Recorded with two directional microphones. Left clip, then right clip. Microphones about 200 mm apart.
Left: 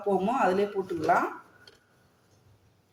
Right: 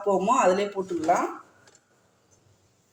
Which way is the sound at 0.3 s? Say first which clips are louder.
Right 3 dB; 20° right (ahead or behind).